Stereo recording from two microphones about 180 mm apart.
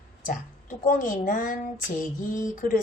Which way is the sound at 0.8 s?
50° left (ahead or behind).